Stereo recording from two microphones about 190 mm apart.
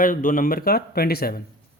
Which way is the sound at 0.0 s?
45° left (ahead or behind).